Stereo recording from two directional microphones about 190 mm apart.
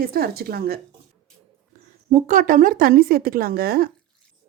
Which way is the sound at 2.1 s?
40° right (ahead or behind).